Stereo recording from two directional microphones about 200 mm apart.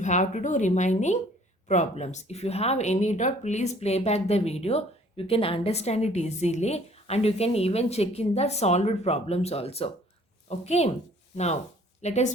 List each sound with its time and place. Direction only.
0.0 s speech: 35° left (ahead or behind)
12.0 s speech: 35° left (ahead or behind)